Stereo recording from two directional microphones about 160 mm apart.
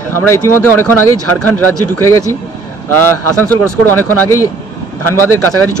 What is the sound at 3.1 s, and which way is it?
A man's voice, 10° left (ahead or behind).